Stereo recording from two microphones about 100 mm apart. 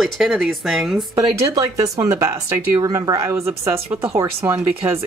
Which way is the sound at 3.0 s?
40° right (ahead or behind).